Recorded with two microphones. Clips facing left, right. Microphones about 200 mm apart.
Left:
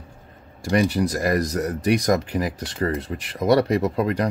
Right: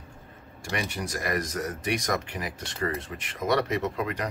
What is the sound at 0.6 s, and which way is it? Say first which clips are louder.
Speech: left 12 dB; 35° left (ahead or behind).